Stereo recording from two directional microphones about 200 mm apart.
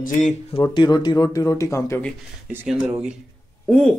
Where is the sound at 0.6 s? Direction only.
20° left (ahead or behind).